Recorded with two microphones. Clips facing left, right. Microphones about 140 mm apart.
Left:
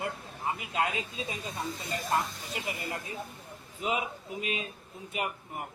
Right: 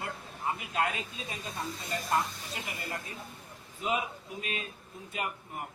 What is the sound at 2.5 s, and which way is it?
A man's voice, 20° left (ahead or behind).